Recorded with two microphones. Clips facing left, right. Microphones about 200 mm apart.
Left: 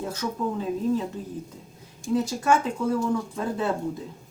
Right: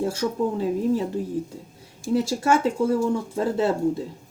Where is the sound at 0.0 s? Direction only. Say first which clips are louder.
Right 5 dB; 30° right (ahead or behind).